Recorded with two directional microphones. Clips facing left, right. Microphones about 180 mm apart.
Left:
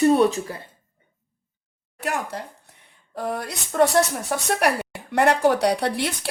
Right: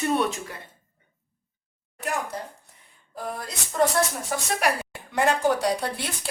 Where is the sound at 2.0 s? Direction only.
70° left (ahead or behind).